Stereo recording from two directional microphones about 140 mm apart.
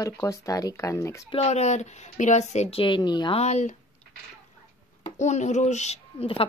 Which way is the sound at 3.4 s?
55° left (ahead or behind).